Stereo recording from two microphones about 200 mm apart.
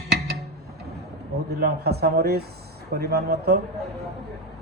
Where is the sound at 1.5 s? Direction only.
50° right (ahead or behind).